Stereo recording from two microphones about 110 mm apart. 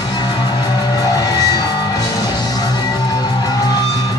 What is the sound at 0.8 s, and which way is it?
Music, 35° left (ahead or behind).